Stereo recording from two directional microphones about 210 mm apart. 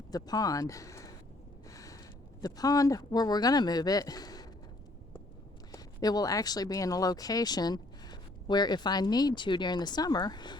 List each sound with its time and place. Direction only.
0.1 s speech: 20° left (ahead or behind)
1.6 s a sound: 15° left (ahead or behind)
2.4 s speech: 15° left (ahead or behind)
5.7 s speech: 20° left (ahead or behind)